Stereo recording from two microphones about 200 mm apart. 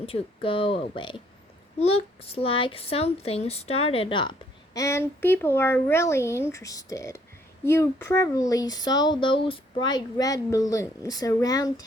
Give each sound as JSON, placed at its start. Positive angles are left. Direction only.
{"t": 0.0, "sound": "a child's voice", "side_deg": 30}